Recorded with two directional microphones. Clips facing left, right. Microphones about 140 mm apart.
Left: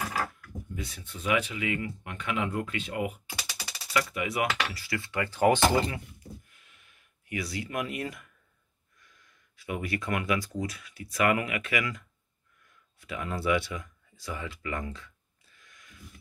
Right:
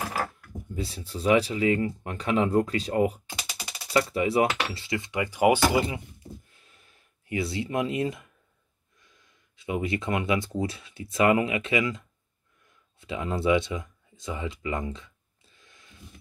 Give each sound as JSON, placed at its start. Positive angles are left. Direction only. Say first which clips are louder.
{"t": 0.2, "sound": "speech", "louder": "right 2 dB", "side_deg": -30}
{"t": 6.1, "sound": "gasp", "louder": "right 2 dB", "side_deg": -30}
{"t": 9.0, "sound": "speech", "louder": "right 1 dB", "side_deg": -25}
{"t": 12.6, "sound": "a sound", "louder": "right 4 dB", "side_deg": -25}